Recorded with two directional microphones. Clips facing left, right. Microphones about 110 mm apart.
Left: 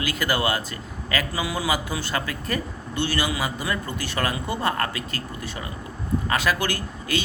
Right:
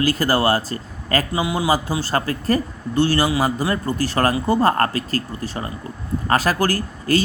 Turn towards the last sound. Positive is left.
turn(degrees=-40)  # may be behind; listen again after turning